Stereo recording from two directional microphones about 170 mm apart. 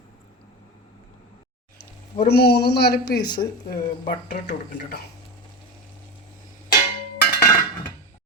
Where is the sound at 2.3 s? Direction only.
70° left (ahead or behind).